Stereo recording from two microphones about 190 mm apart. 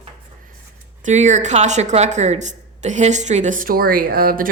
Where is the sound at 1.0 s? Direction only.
40° right (ahead or behind).